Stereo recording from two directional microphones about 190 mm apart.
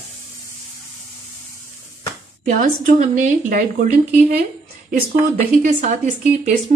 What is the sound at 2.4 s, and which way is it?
A woman's voice, 40° right (ahead or behind).